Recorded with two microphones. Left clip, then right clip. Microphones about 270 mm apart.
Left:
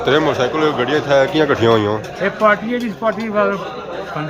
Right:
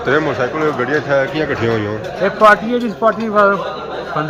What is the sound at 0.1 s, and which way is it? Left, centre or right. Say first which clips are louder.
Speech: even; centre.